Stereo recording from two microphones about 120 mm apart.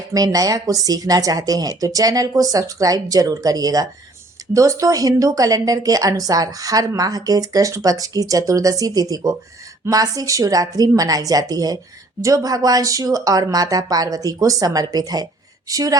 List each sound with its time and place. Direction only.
0.1 s a woman's voice: 30° right (ahead or behind)